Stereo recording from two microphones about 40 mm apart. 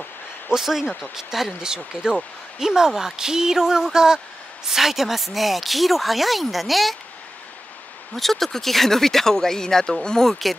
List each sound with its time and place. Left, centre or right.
0.5 s speech: centre
2.9 s speech: centre
8.2 s speech: centre